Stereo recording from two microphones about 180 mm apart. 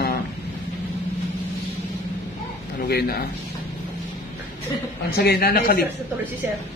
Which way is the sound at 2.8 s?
60° left (ahead or behind).